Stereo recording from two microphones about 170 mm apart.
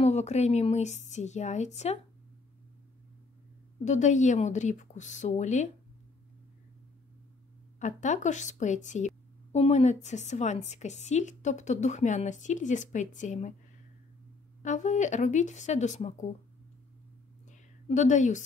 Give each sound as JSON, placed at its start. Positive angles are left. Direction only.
{"t": 0.0, "sound": "a woman's voice", "side_deg": 40}
{"t": 3.8, "sound": "a woman's voice", "side_deg": 45}
{"t": 7.8, "sound": "a woman's voice", "side_deg": 45}
{"t": 14.6, "sound": "a woman's voice", "side_deg": 45}
{"t": 17.5, "sound": "a sound", "side_deg": 45}